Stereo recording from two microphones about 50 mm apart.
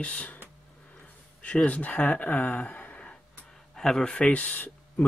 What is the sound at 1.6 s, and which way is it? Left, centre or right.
Speech, left.